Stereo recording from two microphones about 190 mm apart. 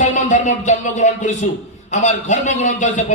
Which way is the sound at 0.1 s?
40° left (ahead or behind).